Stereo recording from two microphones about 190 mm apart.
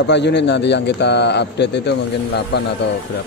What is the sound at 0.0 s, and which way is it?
Speech, 65° left (ahead or behind).